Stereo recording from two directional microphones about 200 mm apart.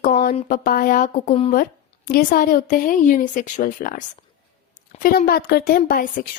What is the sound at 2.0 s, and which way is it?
Speech, 45° left (ahead or behind).